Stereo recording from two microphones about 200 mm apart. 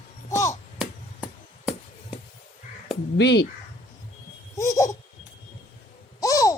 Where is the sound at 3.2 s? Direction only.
60° left (ahead or behind).